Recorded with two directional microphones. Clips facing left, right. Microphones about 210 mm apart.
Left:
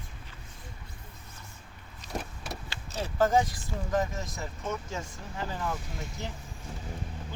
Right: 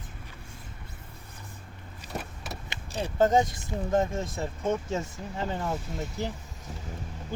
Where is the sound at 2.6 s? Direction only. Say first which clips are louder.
Right 4 dB; 15° right (ahead or behind).